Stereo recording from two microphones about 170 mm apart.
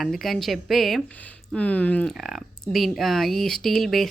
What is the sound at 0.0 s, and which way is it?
Speech, centre (ahead or behind).